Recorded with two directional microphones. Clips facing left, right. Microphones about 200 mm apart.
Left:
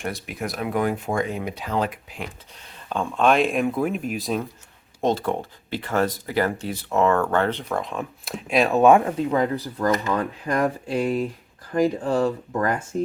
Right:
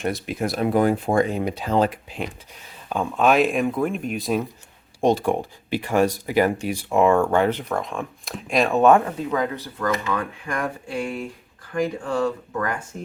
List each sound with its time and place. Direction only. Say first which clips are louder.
0.0 s speech: right 5 dB; 25° right (ahead or behind)
2.9 s speech: right 1 dB; 5° right (ahead or behind)
5.0 s speech: right 3 dB; 15° right (ahead or behind)
7.7 s speech: right 1 dB; centre (ahead or behind)
9.3 s speech: left 2 dB; 30° left (ahead or behind)
11.7 s speech: left 3 dB; 40° left (ahead or behind)